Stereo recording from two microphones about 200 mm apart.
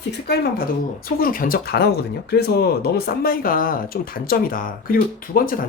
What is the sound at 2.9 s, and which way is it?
Speech, 50° left (ahead or behind).